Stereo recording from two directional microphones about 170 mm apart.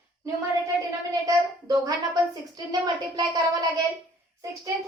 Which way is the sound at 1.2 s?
20° right (ahead or behind).